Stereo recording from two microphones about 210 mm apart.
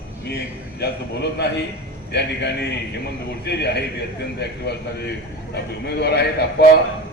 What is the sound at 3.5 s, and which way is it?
A man's voice, 50° left (ahead or behind).